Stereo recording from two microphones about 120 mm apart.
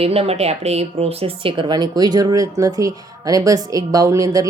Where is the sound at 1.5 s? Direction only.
35° right (ahead or behind).